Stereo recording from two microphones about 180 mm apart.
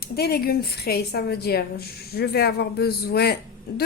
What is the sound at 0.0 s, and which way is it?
A woman's voice, 60° left (ahead or behind).